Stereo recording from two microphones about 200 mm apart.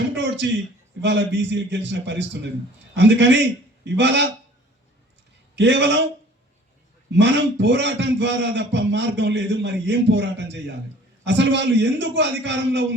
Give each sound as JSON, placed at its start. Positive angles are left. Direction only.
{"t": 0.1, "sound": "a sound", "side_deg": -60}
{"t": 1.0, "sound": "a man's voice", "side_deg": -60}
{"t": 5.5, "sound": "a man's voice", "side_deg": -60}
{"t": 7.1, "sound": "a man's voice", "side_deg": -60}